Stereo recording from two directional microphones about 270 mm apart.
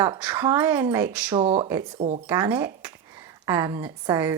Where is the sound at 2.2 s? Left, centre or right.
Centre.